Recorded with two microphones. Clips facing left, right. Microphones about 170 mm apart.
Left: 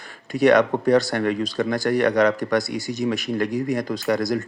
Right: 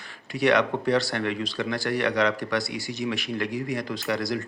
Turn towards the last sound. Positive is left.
turn(degrees=45)  # may be behind; listen again after turning